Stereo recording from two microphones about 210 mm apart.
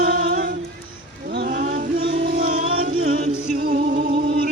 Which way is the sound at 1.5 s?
35° right (ahead or behind).